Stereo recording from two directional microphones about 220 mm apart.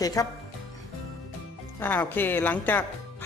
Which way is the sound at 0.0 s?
15° left (ahead or behind).